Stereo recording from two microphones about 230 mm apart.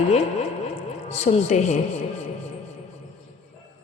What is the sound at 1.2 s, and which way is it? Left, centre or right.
Speech, left.